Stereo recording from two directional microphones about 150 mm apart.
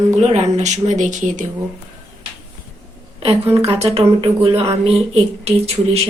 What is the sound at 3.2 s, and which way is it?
A woman's voice, 40° right (ahead or behind).